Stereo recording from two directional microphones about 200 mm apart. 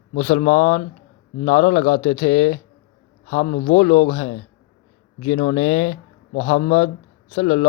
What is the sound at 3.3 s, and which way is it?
Speech, 50° left (ahead or behind).